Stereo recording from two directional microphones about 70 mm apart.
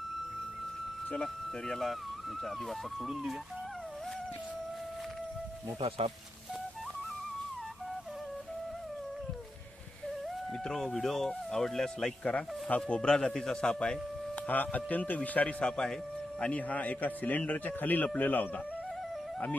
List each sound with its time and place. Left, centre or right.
1.1 s speech: centre
10.6 s speech: centre
14.5 s a man's voice: left